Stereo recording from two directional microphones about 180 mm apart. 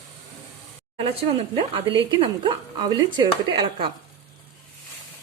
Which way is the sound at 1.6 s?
30° right (ahead or behind).